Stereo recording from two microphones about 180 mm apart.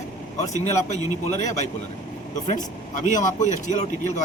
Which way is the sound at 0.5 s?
40° left (ahead or behind).